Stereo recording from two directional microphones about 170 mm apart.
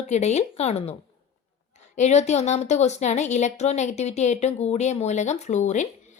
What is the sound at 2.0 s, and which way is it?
A woman's voice, 40° left (ahead or behind).